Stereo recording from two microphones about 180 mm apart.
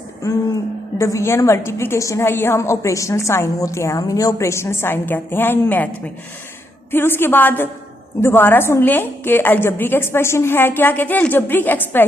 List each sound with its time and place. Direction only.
0.9 s a woman's voice: 15° left (ahead or behind)
6.9 s a woman's voice: 10° left (ahead or behind)